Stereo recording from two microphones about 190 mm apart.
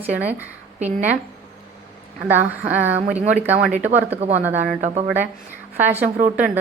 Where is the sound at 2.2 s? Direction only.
10° right (ahead or behind).